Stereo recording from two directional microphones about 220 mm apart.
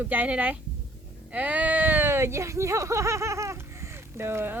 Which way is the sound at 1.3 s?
5° right (ahead or behind).